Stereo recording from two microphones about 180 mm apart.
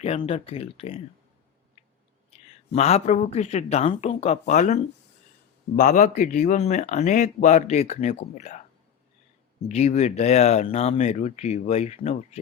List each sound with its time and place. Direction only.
0.0 s speech: 35° left (ahead or behind)
2.7 s speech: 40° left (ahead or behind)